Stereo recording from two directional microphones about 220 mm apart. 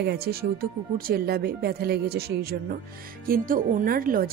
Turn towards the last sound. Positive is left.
turn(degrees=-40)  # may be behind; listen again after turning